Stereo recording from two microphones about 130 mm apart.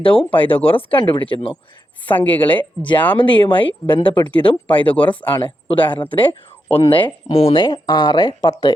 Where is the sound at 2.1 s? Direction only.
15° left (ahead or behind).